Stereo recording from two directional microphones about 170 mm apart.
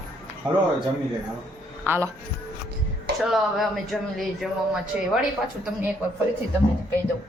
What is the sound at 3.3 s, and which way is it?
Speech, centre (ahead or behind).